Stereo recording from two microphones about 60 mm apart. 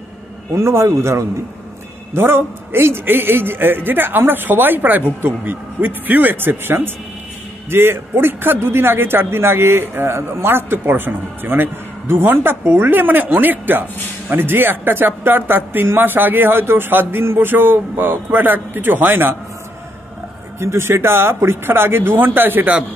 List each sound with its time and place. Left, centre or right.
0.6 s speech: right
2.1 s speech: right
20.5 s speech: right